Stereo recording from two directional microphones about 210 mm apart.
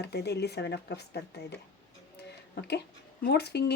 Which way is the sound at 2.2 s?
50° left (ahead or behind).